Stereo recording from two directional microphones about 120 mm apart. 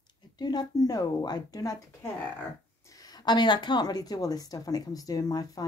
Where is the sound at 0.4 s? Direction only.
35° left (ahead or behind).